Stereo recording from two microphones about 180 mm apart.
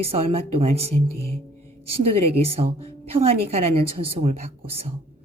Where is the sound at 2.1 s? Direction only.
35° right (ahead or behind).